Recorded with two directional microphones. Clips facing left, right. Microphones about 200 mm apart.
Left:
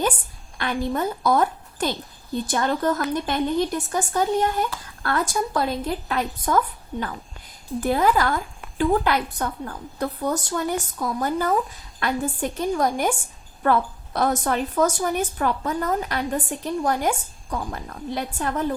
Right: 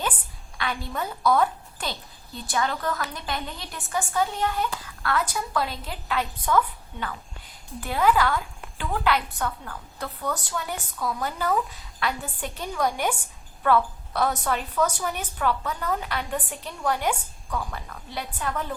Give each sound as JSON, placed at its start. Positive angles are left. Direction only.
{"t": 0.5, "sound": "a woman's voice", "side_deg": 45}